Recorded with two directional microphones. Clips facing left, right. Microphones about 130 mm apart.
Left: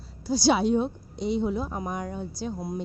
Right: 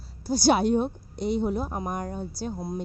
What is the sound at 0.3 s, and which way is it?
A woman's voice, 50° right (ahead or behind).